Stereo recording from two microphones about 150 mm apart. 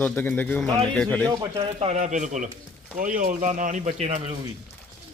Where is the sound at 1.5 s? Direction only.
40° right (ahead or behind).